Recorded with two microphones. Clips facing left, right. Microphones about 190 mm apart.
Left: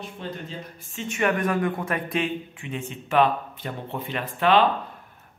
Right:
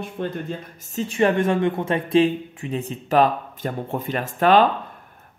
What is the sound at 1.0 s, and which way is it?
Speech, 30° right (ahead or behind).